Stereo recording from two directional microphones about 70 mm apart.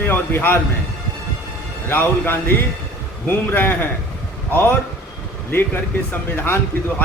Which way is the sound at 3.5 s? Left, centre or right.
Left.